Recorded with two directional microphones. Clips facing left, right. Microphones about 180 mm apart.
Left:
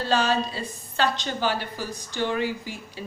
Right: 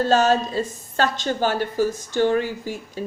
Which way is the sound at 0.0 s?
45° right (ahead or behind).